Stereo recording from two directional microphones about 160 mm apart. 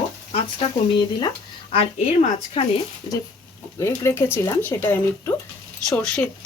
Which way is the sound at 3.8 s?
15° left (ahead or behind).